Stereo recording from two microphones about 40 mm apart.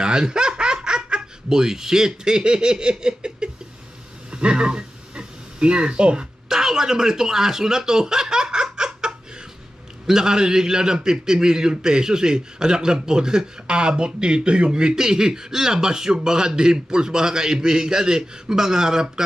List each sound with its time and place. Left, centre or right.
0.0 s baby laughter: right
0.8 s speech: centre
4.3 s a sound: right
6.6 s a man's voice: centre